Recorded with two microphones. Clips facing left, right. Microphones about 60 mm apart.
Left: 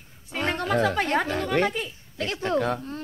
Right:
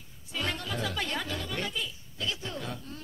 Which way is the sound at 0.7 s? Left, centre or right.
Left.